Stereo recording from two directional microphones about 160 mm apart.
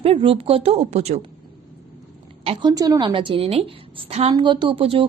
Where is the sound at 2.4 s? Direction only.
30° right (ahead or behind).